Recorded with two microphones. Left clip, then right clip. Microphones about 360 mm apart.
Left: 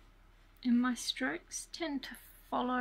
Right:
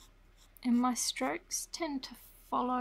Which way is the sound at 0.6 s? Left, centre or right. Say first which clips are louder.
Right 2 dB; centre.